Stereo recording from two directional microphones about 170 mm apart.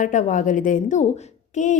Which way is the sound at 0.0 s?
45° left (ahead or behind).